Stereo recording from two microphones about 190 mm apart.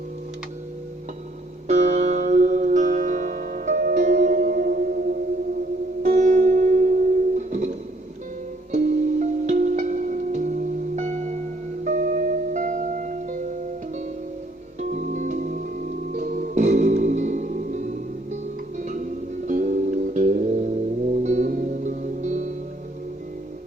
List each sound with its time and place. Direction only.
1.6 s music: 40° right (ahead or behind)
6.0 s music: 40° right (ahead or behind)
14.8 s music: 40° right (ahead or behind)
18.8 s music: 40° right (ahead or behind)